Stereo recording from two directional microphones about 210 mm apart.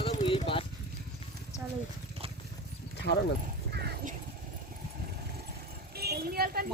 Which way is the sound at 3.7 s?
50° right (ahead or behind).